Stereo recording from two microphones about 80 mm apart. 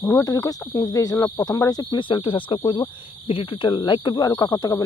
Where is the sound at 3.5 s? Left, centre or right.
Left.